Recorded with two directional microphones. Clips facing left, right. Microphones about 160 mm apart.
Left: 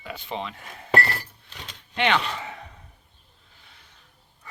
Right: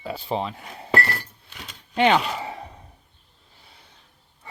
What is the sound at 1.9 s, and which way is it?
Speech, 40° right (ahead or behind).